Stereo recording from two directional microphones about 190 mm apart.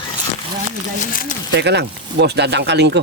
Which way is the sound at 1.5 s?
65° right (ahead or behind).